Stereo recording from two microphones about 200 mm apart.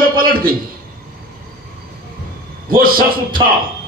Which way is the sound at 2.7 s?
45° right (ahead or behind).